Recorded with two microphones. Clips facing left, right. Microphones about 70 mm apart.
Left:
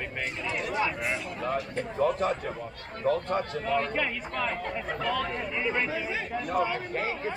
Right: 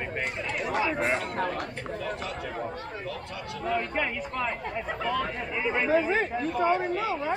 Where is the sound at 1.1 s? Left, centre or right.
Right.